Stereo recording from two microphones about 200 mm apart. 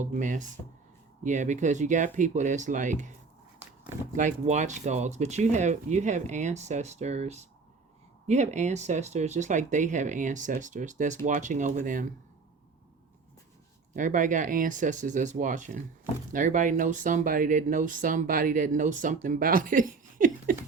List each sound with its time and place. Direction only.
0.0 s speech: 40° right (ahead or behind)
4.1 s speech: 40° right (ahead or behind)
13.9 s speech: 40° right (ahead or behind)